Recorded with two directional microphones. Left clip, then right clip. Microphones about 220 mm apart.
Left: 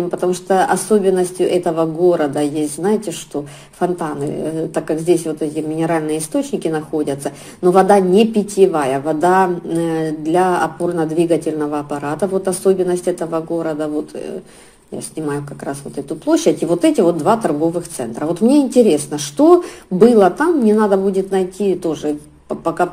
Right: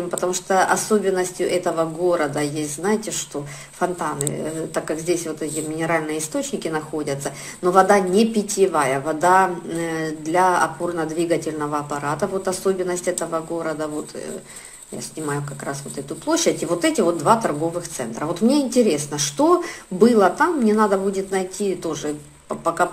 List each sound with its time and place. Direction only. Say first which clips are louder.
0.1 s a woman's voice: left 3 dB; 25° left (ahead or behind)
15.2 s a woman's voice: left 3 dB; 20° left (ahead or behind)